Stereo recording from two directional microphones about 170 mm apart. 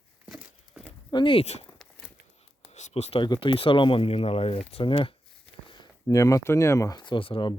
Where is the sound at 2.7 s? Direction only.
40° left (ahead or behind).